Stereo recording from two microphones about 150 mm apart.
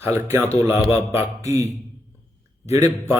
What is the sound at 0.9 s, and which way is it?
Speech, 15° right (ahead or behind).